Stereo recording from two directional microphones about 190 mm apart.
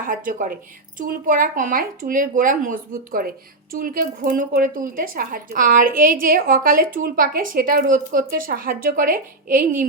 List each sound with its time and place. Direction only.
0.1 s speech: 45° right (ahead or behind)